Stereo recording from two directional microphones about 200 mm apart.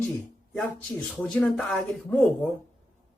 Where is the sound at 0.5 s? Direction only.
5° left (ahead or behind).